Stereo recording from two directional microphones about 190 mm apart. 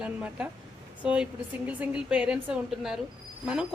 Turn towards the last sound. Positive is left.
turn(degrees=-5)  # may be behind; listen again after turning